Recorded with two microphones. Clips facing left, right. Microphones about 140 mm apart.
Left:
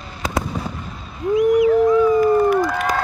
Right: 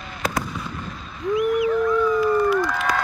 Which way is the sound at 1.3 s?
25° left (ahead or behind).